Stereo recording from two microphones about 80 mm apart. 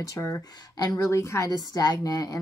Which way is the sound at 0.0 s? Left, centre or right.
Left.